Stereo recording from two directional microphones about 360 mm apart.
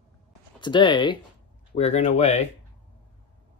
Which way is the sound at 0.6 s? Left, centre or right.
Centre.